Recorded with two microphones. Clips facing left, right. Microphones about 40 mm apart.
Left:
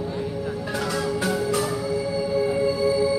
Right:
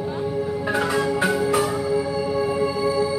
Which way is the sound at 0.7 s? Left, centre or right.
Right.